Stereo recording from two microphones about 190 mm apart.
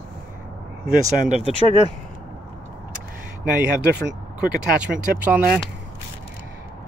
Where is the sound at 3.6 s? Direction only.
60° right (ahead or behind).